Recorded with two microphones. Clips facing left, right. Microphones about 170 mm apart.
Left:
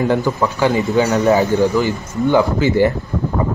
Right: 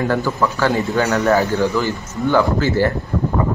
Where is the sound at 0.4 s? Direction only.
15° left (ahead or behind).